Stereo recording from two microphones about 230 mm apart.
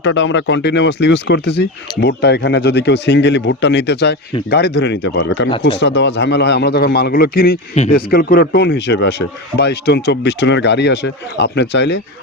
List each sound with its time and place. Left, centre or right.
0.0 s speech: left
5.5 s speech: left
5.8 s speech: left